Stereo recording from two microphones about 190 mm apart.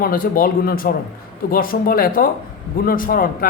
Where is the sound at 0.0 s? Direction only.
50° left (ahead or behind).